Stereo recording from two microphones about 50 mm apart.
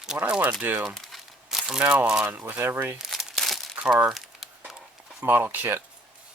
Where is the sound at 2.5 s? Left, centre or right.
Right.